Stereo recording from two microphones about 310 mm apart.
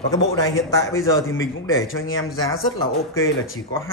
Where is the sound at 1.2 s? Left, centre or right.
Left.